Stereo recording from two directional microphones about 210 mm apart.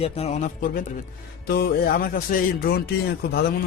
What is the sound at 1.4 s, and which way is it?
Speech, 50° left (ahead or behind).